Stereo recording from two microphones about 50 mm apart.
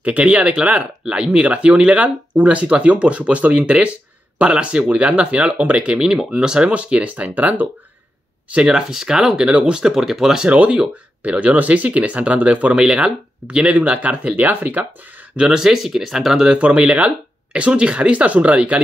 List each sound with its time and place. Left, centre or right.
0.0 s speech: right
8.9 s speech: centre
10.4 s speech: right
15.3 s speech: centre
16.4 s speech: right